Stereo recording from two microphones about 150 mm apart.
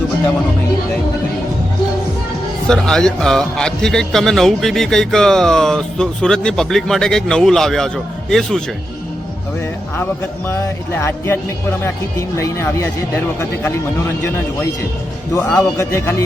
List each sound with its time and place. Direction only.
2.6 s a man's voice: 5° left (ahead or behind)
10.5 s speech: 15° left (ahead or behind)
15.4 s speech: 10° left (ahead or behind)